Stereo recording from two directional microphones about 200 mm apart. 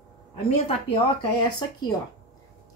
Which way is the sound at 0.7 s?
30° left (ahead or behind).